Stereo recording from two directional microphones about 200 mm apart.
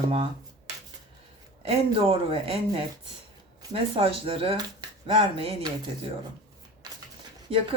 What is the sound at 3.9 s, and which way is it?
Speech, 25° right (ahead or behind).